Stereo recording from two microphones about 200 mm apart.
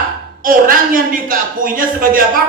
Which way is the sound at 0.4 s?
45° right (ahead or behind).